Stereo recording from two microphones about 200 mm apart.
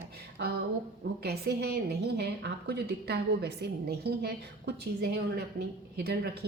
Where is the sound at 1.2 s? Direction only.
55° right (ahead or behind).